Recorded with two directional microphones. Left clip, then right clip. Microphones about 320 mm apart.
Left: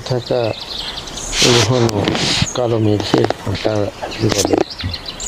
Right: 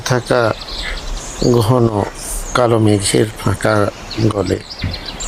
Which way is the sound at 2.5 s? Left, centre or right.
Centre.